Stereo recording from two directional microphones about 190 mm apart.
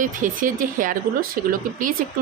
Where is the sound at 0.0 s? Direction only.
45° right (ahead or behind).